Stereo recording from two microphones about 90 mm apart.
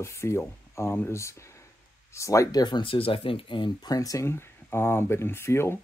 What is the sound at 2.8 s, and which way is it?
Speech, 85° left.